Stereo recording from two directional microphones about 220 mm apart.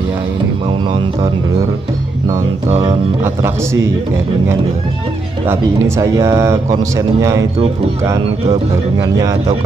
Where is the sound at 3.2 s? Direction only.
10° right (ahead or behind).